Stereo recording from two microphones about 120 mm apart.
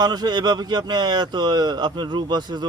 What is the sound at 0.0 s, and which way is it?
Speech, 35° right (ahead or behind).